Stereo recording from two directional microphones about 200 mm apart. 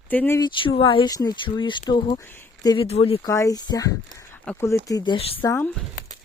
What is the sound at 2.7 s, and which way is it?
Speech, 30° left (ahead or behind).